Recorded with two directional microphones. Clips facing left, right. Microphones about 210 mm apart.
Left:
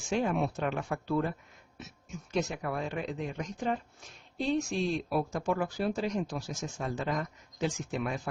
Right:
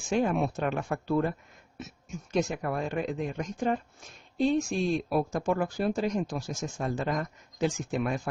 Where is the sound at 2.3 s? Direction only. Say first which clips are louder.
Right 3 dB; 50° right (ahead or behind).